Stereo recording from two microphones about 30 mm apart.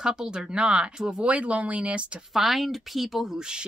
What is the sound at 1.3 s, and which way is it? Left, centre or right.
Speech, right.